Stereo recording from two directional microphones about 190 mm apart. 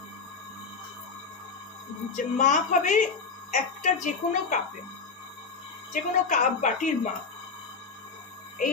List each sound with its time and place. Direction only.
2.1 s a woman's voice: 40° left (ahead or behind)
5.9 s a woman's voice: 40° left (ahead or behind)